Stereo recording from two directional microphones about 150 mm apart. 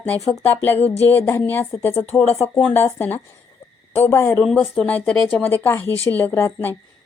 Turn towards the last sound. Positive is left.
turn(degrees=20)  # may be behind; listen again after turning